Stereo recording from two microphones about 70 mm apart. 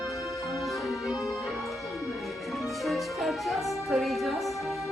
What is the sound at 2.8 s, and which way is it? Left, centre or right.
Music, centre.